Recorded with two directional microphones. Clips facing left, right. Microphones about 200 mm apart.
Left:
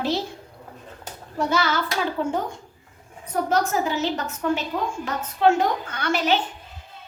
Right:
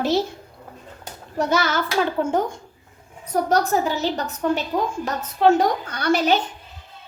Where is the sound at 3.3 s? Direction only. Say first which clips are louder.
Right 3 dB; 35° right (ahead or behind).